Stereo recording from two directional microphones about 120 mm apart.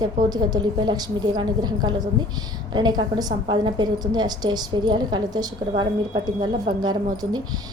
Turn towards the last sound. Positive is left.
turn(degrees=-35)  # may be behind; listen again after turning